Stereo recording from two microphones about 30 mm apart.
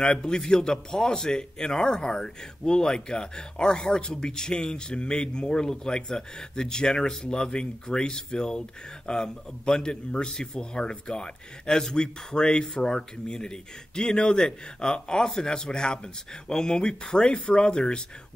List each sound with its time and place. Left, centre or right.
0.5 s speech: left